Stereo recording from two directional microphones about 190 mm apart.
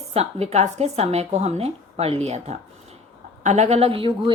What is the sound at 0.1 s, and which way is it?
Speech, 35° right (ahead or behind).